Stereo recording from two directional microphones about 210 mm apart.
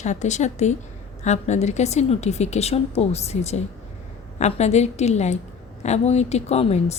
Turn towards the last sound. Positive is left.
turn(degrees=30)  # may be behind; listen again after turning